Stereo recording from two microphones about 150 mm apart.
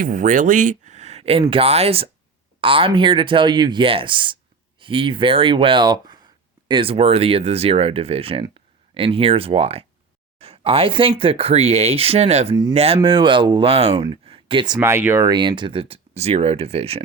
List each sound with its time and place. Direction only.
0.0 s speech: 60° right (ahead or behind); by 14.8 s 35° right (ahead or behind)
14.8 s speech: 15° right (ahead or behind); by 17.0 s 40° right (ahead or behind)